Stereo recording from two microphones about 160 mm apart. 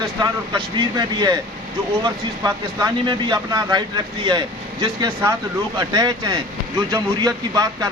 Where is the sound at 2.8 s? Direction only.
30° right (ahead or behind).